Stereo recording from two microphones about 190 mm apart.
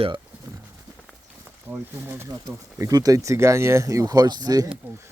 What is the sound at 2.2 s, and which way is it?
Speech, 15° right (ahead or behind).